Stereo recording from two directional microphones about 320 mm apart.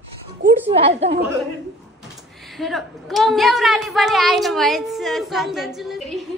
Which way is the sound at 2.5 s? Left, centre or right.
Centre.